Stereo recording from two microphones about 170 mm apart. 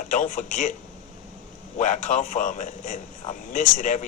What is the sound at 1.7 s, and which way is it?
Speech, 45° left (ahead or behind).